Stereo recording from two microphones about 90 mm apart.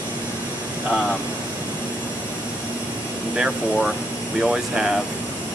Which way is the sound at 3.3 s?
10° right (ahead or behind).